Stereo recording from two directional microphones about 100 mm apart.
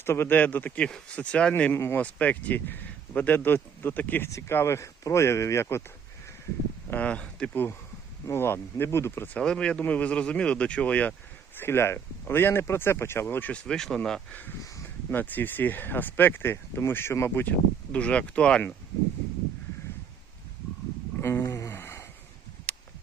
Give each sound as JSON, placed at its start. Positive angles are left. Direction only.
{"t": 0.0, "sound": "speech", "side_deg": 25}
{"t": 1.7, "sound": "speech", "side_deg": 25}
{"t": 4.3, "sound": "speech", "side_deg": 30}
{"t": 6.9, "sound": "speech", "side_deg": 15}
{"t": 9.4, "sound": "speech", "side_deg": 10}
{"t": 11.5, "sound": "speech", "side_deg": 25}
{"t": 13.7, "sound": "speech", "side_deg": 5}
{"t": 15.1, "sound": "speech", "side_deg": 20}
{"t": 17.9, "sound": "speech", "side_deg": 10}
{"t": 21.2, "sound": "a sound", "side_deg": 25}
{"t": 22.7, "sound": "a sound", "side_deg": 15}